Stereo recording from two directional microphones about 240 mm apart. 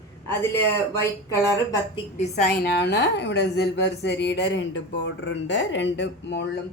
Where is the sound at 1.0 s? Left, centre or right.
Centre.